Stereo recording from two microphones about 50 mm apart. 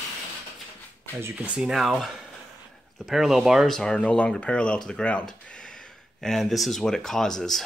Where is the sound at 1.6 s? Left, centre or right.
Centre.